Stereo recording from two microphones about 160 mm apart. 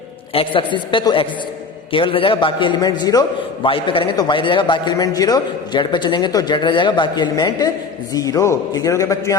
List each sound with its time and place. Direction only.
0.3 s a man's voice: 30° left (ahead or behind)